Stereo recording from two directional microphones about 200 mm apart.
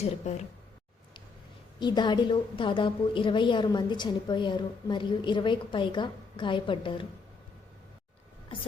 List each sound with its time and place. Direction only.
0.0 s speech: 35° left (ahead or behind)
1.8 s a woman's voice: 20° left (ahead or behind)